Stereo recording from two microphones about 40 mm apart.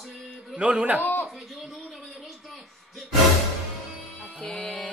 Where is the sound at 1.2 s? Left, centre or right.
Centre.